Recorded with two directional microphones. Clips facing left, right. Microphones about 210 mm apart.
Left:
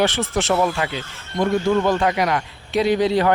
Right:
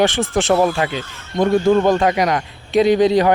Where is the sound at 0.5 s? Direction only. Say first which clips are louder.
Right 4 dB; 25° right (ahead or behind).